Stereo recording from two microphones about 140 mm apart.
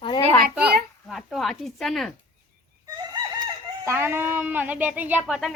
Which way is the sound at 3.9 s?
15° right (ahead or behind).